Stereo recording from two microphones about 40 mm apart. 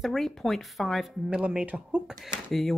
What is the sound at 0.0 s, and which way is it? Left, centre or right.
Speech, centre.